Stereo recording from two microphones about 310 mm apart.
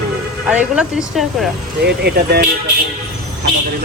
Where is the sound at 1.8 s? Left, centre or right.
Right.